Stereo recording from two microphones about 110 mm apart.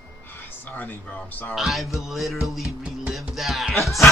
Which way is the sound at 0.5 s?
15° left (ahead or behind).